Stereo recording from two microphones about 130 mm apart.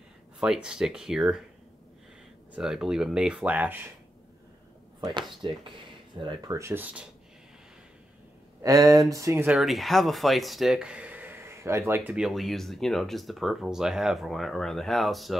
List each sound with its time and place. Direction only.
0.4 s speech: 5° right (ahead or behind)
2.5 s speech: 5° right (ahead or behind)
5.4 s speech: 35° right (ahead or behind)
6.5 s speech: 20° right (ahead or behind)
8.6 s speech: 25° right (ahead or behind)
9.5 s speech: centre (ahead or behind); by 12.1 s 20° right (ahead or behind)
12.1 s speech: centre (ahead or behind)